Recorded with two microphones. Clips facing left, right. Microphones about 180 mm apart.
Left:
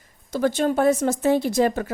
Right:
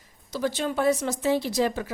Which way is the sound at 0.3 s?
50° left (ahead or behind).